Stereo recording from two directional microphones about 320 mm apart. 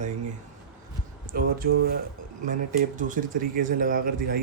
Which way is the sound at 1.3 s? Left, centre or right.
Right.